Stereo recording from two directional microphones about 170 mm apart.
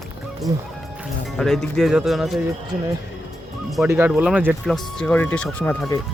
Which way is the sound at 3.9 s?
10° right (ahead or behind).